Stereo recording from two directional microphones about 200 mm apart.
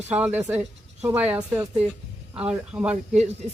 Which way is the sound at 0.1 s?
10° right (ahead or behind).